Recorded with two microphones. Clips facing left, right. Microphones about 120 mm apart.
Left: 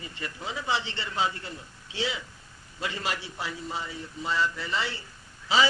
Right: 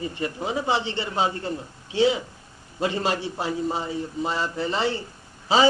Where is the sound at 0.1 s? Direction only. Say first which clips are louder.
Right 9 dB; 25° right (ahead or behind).